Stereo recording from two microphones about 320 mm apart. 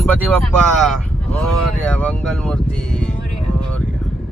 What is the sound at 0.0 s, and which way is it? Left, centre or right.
Speech, centre.